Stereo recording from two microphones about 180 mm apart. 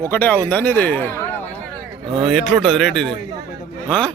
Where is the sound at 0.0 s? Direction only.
10° left (ahead or behind).